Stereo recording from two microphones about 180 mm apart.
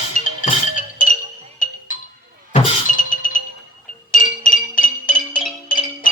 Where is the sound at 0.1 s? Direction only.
45° left (ahead or behind).